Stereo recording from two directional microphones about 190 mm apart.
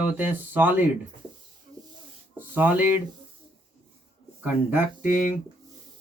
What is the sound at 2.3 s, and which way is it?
Speech, 10° right (ahead or behind).